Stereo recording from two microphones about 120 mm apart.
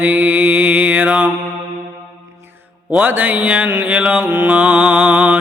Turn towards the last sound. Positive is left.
turn(degrees=-15)  # may be behind; listen again after turning